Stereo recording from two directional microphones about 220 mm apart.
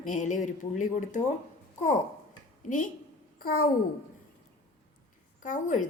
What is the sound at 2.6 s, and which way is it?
A child's voice, 35° left (ahead or behind).